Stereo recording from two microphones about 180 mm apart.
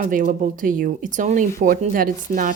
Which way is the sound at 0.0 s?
50° right (ahead or behind).